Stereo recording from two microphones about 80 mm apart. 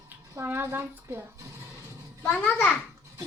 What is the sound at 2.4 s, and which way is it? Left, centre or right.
Speech, centre.